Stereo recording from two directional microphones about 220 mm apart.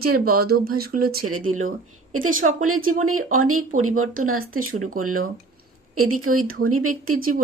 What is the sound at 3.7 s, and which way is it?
Speech, 35° right (ahead or behind).